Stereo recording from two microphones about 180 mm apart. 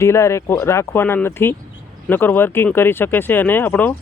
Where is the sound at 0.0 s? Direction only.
15° left (ahead or behind).